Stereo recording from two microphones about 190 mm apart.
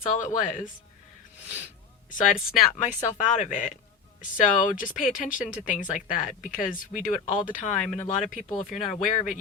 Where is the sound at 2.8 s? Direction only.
40° left (ahead or behind).